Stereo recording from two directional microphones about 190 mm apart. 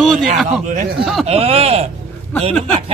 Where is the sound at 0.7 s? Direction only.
40° right (ahead or behind).